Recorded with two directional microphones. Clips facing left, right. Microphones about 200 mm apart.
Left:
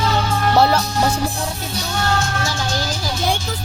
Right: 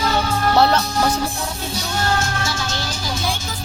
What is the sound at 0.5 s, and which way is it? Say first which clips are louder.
Music: left 1 dB; 10° left (ahead or behind).